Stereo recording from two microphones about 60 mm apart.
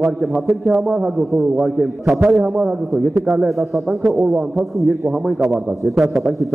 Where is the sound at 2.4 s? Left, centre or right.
Centre.